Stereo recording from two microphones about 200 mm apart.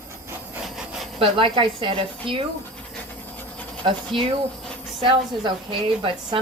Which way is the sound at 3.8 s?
25° right (ahead or behind).